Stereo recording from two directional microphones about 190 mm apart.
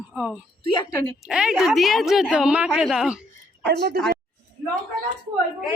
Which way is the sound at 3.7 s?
60° right (ahead or behind).